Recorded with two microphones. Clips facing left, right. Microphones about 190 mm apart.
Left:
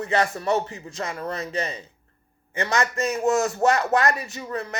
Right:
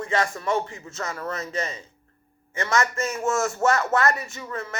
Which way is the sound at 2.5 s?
35° left (ahead or behind).